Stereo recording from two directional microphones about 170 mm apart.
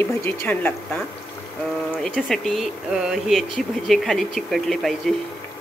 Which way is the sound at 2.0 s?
Centre (ahead or behind).